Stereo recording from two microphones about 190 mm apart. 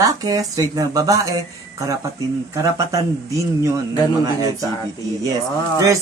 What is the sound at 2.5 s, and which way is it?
Speech, 15° right (ahead or behind).